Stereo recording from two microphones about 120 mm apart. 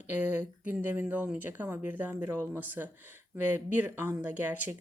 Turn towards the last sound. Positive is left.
turn(degrees=-15)  # may be behind; listen again after turning